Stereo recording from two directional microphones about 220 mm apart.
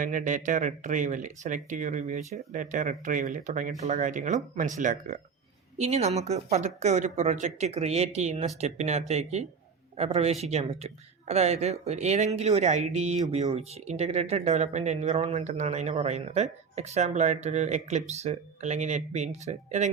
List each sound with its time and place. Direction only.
0.0 s speech: 35° right (ahead or behind)